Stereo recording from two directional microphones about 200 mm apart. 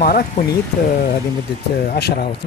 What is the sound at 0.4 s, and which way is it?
Speech, 35° left (ahead or behind).